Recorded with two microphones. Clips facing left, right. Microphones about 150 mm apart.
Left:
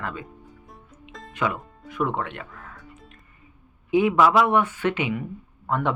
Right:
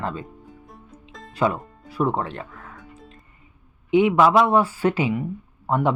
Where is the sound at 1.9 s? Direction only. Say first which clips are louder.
Right 3 dB; 35° right (ahead or behind).